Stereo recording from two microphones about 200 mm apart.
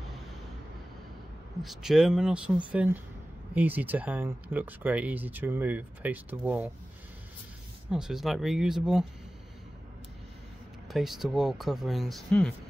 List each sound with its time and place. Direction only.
1.6 s speech: centre (ahead or behind)
7.9 s speech: 5° right (ahead or behind)
10.9 s speech: centre (ahead or behind)